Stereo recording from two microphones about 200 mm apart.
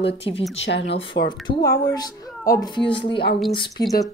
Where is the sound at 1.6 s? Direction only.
20° left (ahead or behind).